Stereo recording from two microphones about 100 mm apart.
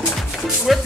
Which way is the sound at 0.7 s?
Centre (ahead or behind).